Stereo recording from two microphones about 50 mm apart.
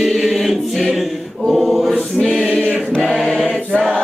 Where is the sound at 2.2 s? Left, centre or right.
Centre.